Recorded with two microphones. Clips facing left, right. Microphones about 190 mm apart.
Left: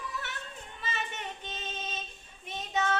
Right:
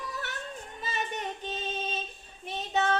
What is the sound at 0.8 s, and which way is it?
Child singing, 40° right (ahead or behind).